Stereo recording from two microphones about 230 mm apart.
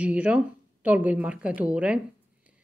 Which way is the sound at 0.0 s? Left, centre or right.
Centre.